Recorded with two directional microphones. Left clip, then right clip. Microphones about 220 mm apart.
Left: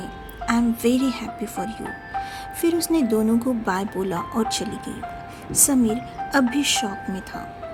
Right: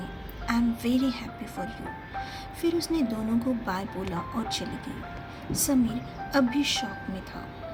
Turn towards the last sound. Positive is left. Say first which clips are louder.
# left 5 dB
turn(degrees=35)  # may be behind; listen again after turning